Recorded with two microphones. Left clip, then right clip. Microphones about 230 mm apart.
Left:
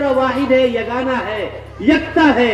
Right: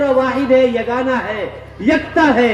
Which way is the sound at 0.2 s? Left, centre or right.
Right.